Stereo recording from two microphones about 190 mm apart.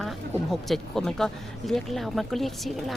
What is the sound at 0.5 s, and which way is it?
Speech, centre (ahead or behind).